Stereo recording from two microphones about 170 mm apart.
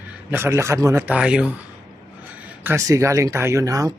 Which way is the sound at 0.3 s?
15° right (ahead or behind).